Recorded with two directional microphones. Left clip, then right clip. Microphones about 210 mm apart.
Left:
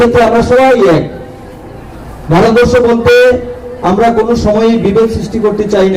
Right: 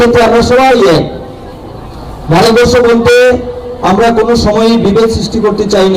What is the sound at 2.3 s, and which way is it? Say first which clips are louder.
A man's voice: right 1 dB; 35° left (ahead or behind).